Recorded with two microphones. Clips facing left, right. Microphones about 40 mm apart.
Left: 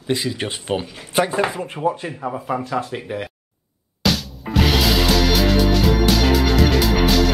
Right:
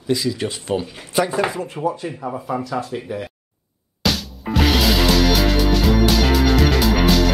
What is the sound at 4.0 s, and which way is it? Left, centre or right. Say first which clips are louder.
Music: left 1 dB; centre.